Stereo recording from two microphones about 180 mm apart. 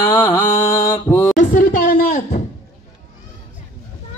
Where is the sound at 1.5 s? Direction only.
50° left (ahead or behind).